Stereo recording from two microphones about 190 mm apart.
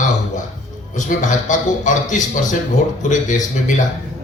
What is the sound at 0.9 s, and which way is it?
Speech, 40° left (ahead or behind).